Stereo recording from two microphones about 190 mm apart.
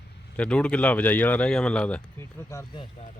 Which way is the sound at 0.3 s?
5° left (ahead or behind).